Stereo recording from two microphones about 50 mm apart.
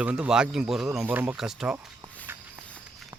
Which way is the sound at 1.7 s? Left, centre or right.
Centre.